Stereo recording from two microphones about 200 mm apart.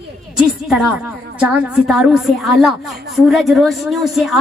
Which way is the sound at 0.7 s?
Centre (ahead or behind).